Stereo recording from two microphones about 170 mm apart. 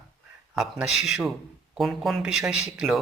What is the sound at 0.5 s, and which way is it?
Speech, 5° right (ahead or behind).